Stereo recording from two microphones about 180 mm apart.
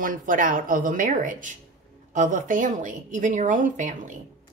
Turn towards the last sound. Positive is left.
turn(degrees=-45)  # may be behind; listen again after turning